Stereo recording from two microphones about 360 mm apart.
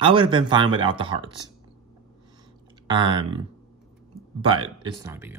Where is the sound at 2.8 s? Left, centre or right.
Centre.